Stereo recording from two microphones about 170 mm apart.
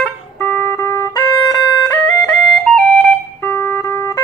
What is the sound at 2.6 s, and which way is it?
Music, 5° left (ahead or behind).